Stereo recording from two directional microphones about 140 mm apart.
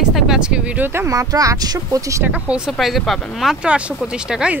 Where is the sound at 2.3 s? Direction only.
10° right (ahead or behind).